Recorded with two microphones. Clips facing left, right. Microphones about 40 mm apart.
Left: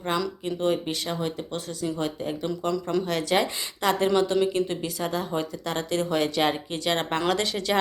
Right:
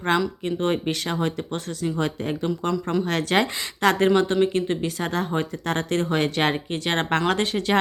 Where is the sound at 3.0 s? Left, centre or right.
Right.